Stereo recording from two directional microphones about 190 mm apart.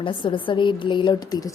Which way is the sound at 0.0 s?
25° left (ahead or behind).